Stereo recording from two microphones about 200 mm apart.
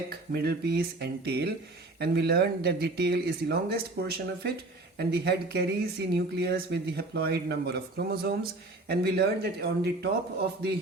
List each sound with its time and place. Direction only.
0.1 s speech: 55° right (ahead or behind)